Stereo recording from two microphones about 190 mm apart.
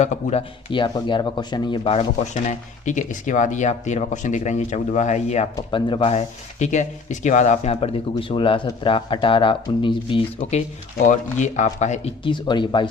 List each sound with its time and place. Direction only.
0.0 s speech: 35° left (ahead or behind)
5.5 s speech: 25° left (ahead or behind)
11.0 s speech: 40° left (ahead or behind); by 12.9 s 25° left (ahead or behind)